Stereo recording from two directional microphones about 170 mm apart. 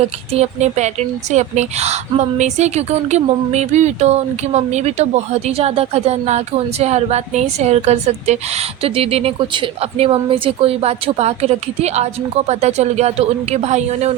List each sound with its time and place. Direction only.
0.3 s a woman's voice: 40° right (ahead or behind)